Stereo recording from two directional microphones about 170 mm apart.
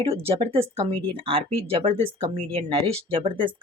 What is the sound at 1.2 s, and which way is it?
Speech, 35° right (ahead or behind).